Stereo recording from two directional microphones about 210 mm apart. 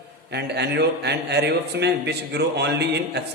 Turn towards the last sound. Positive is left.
turn(degrees=-55)  # may be behind; listen again after turning